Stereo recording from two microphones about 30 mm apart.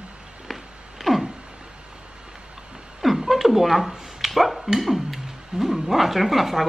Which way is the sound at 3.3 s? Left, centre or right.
Centre.